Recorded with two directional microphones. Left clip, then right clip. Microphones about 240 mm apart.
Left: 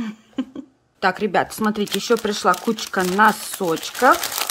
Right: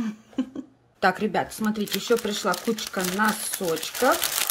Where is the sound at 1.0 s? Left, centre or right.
Centre.